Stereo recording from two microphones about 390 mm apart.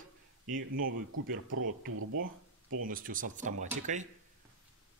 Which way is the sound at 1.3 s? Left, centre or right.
Right.